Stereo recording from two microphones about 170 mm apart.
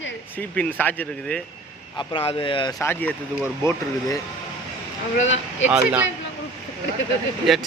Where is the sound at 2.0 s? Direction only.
30° left (ahead or behind).